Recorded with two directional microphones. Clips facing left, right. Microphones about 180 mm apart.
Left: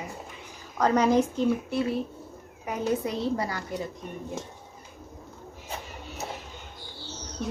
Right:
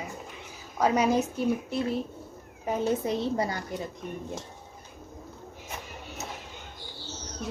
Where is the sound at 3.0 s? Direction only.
25° right (ahead or behind).